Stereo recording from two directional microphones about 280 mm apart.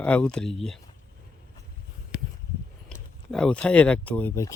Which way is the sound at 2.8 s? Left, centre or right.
Centre.